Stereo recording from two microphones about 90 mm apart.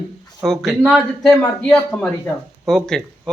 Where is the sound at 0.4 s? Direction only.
Centre (ahead or behind).